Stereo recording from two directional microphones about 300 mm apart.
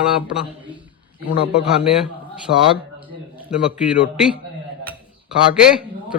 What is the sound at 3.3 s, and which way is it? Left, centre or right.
A man's voice, centre.